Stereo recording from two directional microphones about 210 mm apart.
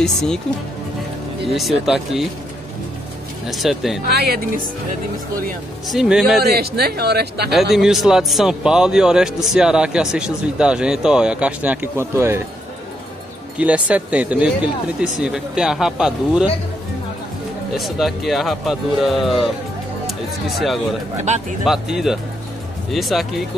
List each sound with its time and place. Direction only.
0.0 s speech: 5° left (ahead or behind)
1.5 s speech: centre (ahead or behind)
3.4 s speech: centre (ahead or behind)
4.1 s speech: 45° right (ahead or behind)
5.9 s speech: centre (ahead or behind)
6.5 s speech: 50° right (ahead or behind)
7.7 s speech: centre (ahead or behind)
13.6 s speech: 5° right (ahead or behind)
17.7 s speech: centre (ahead or behind)